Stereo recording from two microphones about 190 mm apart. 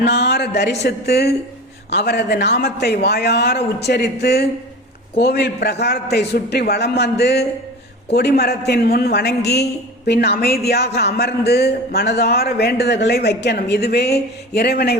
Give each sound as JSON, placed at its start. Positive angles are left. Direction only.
{"t": 0.0, "sound": "speech", "side_deg": 60}